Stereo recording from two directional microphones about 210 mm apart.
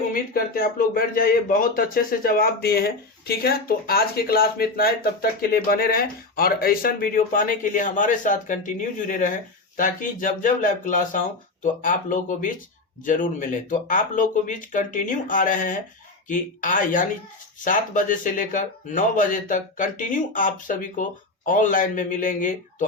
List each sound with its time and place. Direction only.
0.1 s speech: 40° left (ahead or behind)